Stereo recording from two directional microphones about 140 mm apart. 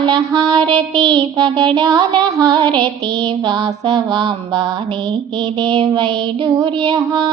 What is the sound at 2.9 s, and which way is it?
Music, 50° right (ahead or behind).